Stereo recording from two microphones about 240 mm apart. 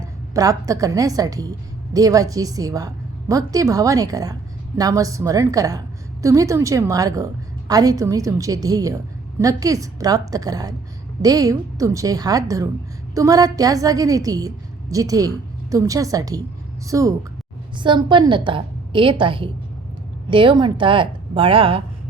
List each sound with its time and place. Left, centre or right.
0.0 s a woman's voice: centre